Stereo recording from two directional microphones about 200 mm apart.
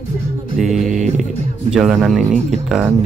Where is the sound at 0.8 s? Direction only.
35° right (ahead or behind).